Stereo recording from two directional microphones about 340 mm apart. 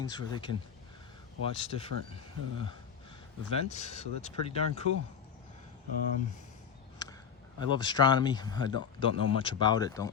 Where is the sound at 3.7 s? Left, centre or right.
Centre.